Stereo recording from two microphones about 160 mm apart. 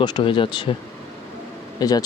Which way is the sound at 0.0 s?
30° left (ahead or behind).